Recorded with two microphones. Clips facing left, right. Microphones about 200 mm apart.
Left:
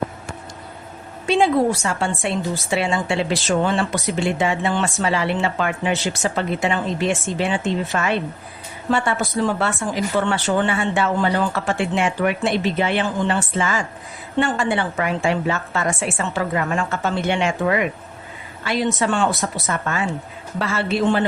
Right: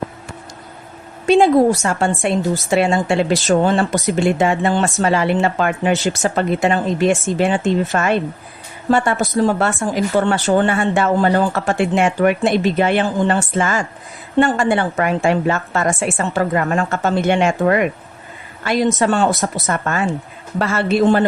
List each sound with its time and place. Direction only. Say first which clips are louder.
1.3 s a woman's voice: right 5 dB; 45° right (ahead or behind)